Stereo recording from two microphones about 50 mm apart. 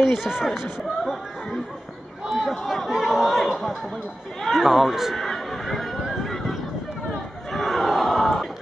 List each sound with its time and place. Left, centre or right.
0.1 s speech: centre
2.2 s chatter: centre
4.4 s a sound: centre
7.5 s crowd: centre